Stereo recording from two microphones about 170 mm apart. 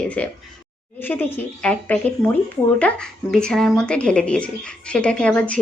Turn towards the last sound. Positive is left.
turn(degrees=5)  # may be behind; listen again after turning